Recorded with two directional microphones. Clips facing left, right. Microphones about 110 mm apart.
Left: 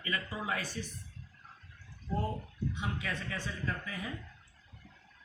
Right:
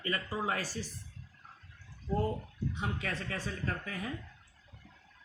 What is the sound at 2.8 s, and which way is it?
Speech, 40° right (ahead or behind).